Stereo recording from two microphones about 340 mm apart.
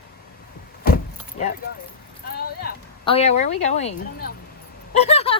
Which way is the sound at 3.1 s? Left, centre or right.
Centre.